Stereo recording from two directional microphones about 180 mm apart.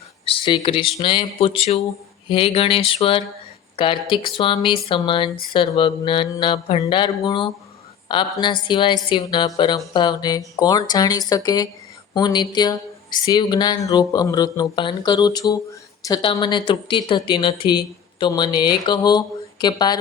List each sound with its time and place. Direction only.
0.3 s speech: 30° left (ahead or behind)
2.3 s a sound: 30° left (ahead or behind)
3.8 s speech: 30° left (ahead or behind)